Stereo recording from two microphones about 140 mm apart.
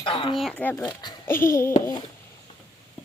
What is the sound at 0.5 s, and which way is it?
Speech, 15° left (ahead or behind).